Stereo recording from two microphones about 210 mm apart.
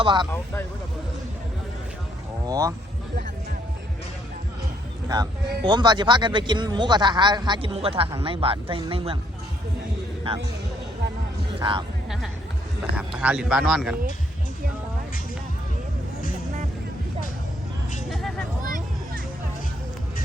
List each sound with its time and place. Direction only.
0.0 s speech: 20° right (ahead or behind)
2.5 s speech: 15° right (ahead or behind)
5.0 s speech: 20° right (ahead or behind)
11.6 s speech: 25° right (ahead or behind)
12.0 s speech: centre (ahead or behind)
18.1 s a sound: centre (ahead or behind)
18.6 s music: 40° right (ahead or behind)